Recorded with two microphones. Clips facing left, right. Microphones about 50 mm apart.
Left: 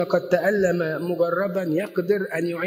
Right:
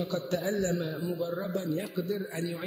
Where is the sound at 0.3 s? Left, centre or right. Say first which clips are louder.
Left 9 dB; left.